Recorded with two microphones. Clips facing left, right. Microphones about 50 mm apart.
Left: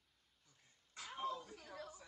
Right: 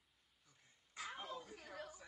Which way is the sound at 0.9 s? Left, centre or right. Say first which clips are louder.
Left 4 dB; right.